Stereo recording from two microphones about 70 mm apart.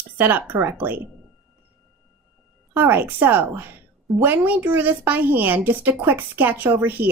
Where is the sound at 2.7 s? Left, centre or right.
Right.